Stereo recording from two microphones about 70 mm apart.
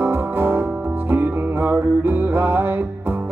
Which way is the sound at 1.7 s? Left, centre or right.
Right.